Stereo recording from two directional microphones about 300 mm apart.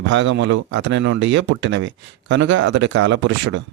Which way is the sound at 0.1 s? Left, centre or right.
Right.